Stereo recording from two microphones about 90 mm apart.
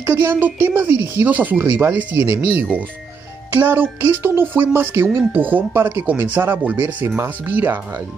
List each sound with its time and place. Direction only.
0.0 s speech: 25° right (ahead or behind)
3.5 s speech: 20° right (ahead or behind)